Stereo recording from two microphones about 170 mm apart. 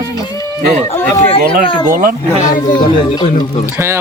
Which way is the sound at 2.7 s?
25° left (ahead or behind).